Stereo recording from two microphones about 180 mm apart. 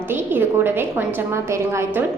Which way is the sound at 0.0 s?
10° right (ahead or behind).